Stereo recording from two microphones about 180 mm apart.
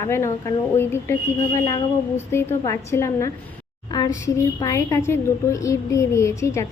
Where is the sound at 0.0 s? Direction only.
15° left (ahead or behind).